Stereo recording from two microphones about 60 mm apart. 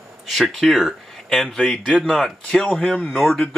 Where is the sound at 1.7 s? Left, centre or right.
Centre.